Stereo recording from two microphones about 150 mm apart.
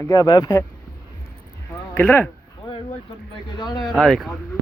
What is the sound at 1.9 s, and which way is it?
Speech, 15° left (ahead or behind).